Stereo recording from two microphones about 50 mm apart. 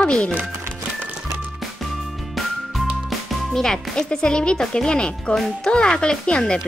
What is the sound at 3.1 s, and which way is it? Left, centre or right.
Speech, centre.